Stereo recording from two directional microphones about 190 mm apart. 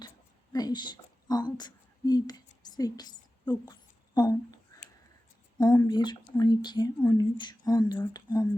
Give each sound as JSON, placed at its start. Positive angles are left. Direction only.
{"t": 0.5, "sound": "a woman's voice", "side_deg": 20}
{"t": 5.5, "sound": "speech", "side_deg": 20}